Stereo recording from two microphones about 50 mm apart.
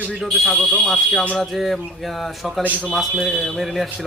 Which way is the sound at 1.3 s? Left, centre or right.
Centre.